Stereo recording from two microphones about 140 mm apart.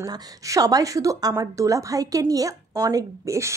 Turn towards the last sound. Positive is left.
turn(degrees=-20)  # may be behind; listen again after turning